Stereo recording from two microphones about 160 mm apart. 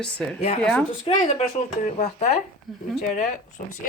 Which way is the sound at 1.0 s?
35° left (ahead or behind).